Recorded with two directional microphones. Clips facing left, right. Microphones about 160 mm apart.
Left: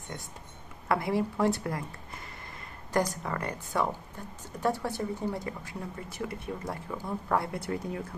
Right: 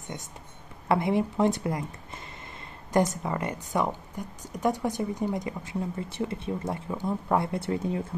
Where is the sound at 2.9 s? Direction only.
20° right (ahead or behind).